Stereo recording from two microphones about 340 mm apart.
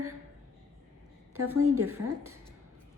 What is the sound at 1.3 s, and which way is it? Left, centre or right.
A woman's voice, right.